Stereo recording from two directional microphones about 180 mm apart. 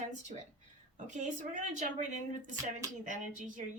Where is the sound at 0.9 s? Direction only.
45° right (ahead or behind).